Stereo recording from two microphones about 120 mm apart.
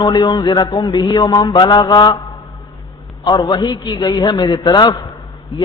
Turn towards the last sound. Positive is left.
turn(degrees=35)  # may be behind; listen again after turning